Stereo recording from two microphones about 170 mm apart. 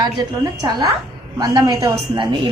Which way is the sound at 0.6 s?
20° right (ahead or behind).